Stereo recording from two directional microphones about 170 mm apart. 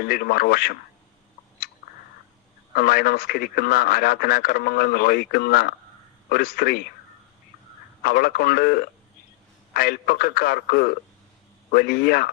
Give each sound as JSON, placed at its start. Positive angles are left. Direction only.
{"t": 0.0, "sound": "speech", "side_deg": 60}
{"t": 2.7, "sound": "speech", "side_deg": 60}
{"t": 8.0, "sound": "speech", "side_deg": 60}